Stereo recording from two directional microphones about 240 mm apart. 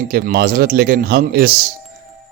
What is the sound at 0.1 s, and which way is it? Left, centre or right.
Speech, right.